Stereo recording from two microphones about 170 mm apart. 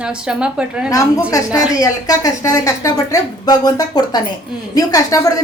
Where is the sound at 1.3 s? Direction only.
20° left (ahead or behind).